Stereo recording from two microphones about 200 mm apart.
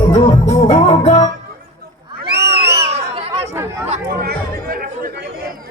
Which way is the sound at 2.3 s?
55° right (ahead or behind).